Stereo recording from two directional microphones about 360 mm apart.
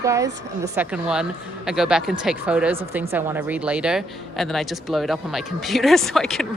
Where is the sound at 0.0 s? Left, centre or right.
Centre.